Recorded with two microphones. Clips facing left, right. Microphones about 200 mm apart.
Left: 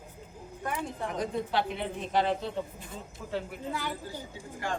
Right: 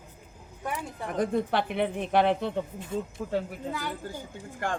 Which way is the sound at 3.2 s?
45° right (ahead or behind).